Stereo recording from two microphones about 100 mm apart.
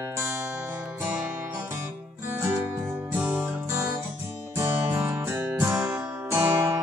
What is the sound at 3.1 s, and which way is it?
Music, 15° right (ahead or behind).